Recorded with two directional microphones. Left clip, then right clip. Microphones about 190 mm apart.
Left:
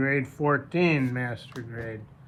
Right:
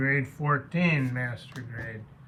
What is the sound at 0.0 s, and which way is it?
Speech, 35° left (ahead or behind).